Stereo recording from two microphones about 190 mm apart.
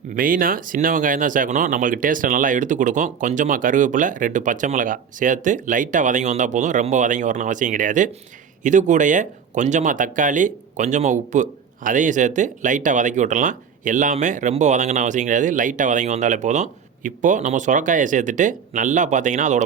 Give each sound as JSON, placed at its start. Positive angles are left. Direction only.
{"t": 0.1, "sound": "speech", "side_deg": -45}